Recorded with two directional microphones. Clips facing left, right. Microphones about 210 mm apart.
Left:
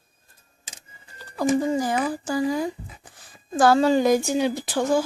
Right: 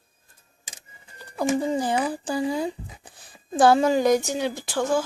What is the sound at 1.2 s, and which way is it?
Music, 15° right (ahead or behind).